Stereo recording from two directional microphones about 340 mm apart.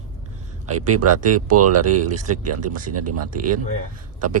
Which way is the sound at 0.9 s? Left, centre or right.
Right.